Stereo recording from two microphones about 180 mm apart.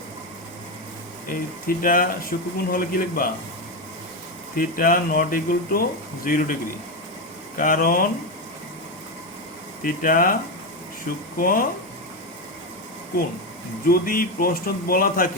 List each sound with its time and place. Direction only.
1.3 s speech: 50° left (ahead or behind)
4.5 s speech: 50° left (ahead or behind)
9.8 s speech: 50° left (ahead or behind)
11.3 s speech: 50° left (ahead or behind)
13.8 s speech: 55° left (ahead or behind)